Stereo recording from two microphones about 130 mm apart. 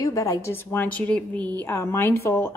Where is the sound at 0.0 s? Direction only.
25° left (ahead or behind).